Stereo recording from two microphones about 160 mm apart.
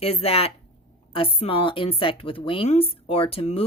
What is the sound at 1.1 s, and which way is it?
A woman's voice, 35° left (ahead or behind).